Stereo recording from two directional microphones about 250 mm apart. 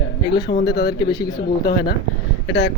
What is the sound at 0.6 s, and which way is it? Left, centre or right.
Speech, centre.